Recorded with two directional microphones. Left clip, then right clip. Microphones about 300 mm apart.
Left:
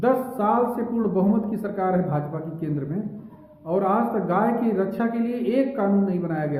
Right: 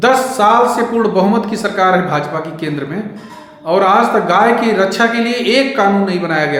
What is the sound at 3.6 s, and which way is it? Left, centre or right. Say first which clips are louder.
A woman's voice: right 12 dB; centre.